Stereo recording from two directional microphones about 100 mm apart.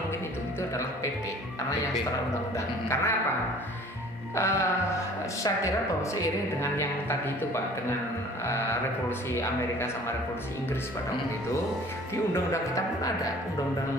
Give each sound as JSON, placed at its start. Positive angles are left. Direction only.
{"t": 0.6, "sound": "speech", "side_deg": 25}
{"t": 2.5, "sound": "speech", "side_deg": 25}
{"t": 4.4, "sound": "speech", "side_deg": 25}
{"t": 6.1, "sound": "speech", "side_deg": 25}
{"t": 12.7, "sound": "speech", "side_deg": 35}